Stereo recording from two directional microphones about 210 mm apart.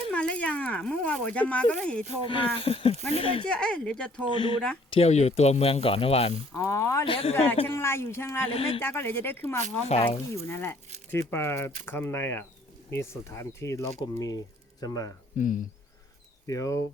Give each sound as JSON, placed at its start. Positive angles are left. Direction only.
{"t": 0.1, "sound": "speech", "side_deg": 5}
{"t": 2.2, "sound": "speech", "side_deg": 25}
{"t": 3.4, "sound": "speech", "side_deg": 5}
{"t": 4.9, "sound": "speech", "side_deg": 30}
{"t": 6.5, "sound": "speech", "side_deg": 15}
{"t": 7.1, "sound": "speech", "side_deg": 30}
{"t": 7.8, "sound": "speech", "side_deg": 10}
{"t": 8.4, "sound": "speech", "side_deg": 25}
{"t": 8.8, "sound": "speech", "side_deg": 10}
{"t": 9.8, "sound": "speech", "side_deg": 25}
{"t": 10.3, "sound": "speech", "side_deg": 10}
{"t": 15.3, "sound": "speech", "side_deg": 35}
{"t": 16.5, "sound": "speech", "side_deg": 15}